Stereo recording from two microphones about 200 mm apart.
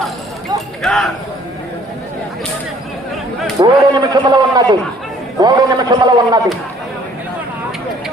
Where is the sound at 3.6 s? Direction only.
20° right (ahead or behind).